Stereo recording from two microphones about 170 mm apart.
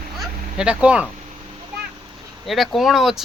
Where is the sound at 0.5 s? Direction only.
5° right (ahead or behind).